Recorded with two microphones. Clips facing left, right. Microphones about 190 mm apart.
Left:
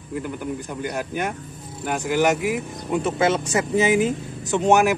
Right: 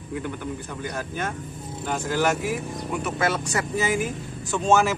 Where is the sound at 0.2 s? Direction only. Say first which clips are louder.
Left 3 dB; 10° left (ahead or behind).